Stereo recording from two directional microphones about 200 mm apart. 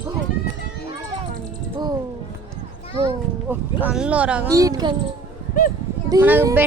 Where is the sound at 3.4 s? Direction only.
5° right (ahead or behind).